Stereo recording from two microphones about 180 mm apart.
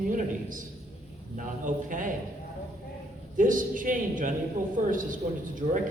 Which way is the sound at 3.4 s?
50° right (ahead or behind).